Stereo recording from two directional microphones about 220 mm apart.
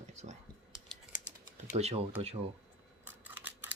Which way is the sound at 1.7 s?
30° right (ahead or behind).